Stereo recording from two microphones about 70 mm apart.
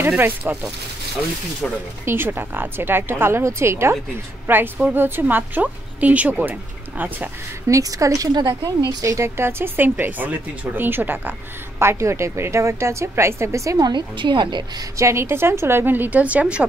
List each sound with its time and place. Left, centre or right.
0.2 s speech: right
2.0 s a woman's voice: right
7.6 s a woman's voice: right
9.4 s speech: right
11.8 s a woman's voice: right
13.8 s a woman's voice: right
15.0 s a woman's voice: right; by 16.6 s centre